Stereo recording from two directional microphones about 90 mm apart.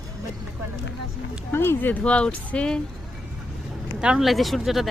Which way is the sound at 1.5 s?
25° left (ahead or behind).